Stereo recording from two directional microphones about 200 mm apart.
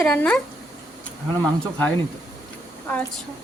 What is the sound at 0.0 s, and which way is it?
Speech, 5° left (ahead or behind).